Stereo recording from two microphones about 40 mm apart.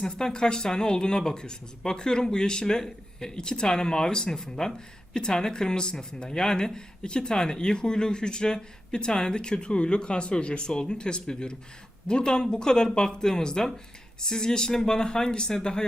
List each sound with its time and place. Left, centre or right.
0.0 s speech: centre